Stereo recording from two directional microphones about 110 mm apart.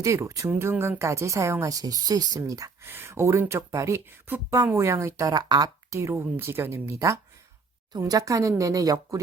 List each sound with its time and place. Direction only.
0.0 s speech: 30° right (ahead or behind)
2.8 s speech: 20° right (ahead or behind)